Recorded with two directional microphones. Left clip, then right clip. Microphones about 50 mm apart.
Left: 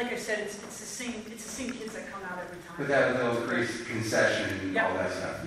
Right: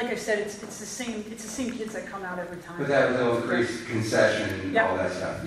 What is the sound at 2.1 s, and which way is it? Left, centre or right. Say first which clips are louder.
Speech: right 4 dB; centre.